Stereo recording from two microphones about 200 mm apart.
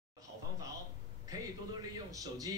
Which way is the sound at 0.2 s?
15° right (ahead or behind).